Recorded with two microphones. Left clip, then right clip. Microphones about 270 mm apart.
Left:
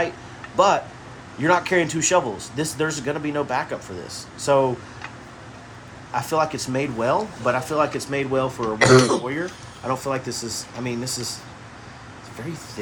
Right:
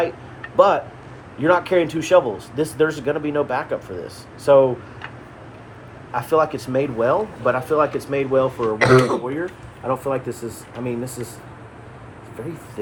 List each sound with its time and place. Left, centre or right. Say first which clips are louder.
0.5 s speech: right 3 dB; left
6.1 s speech: right 3 dB; left
8.8 s a man's voice: even; centre
9.8 s speech: right 3 dB; left